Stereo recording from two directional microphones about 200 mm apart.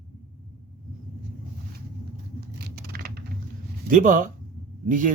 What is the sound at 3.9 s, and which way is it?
Speech, 40° right (ahead or behind).